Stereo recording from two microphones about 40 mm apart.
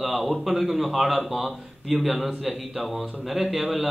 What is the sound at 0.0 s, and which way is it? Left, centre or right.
Speech, centre.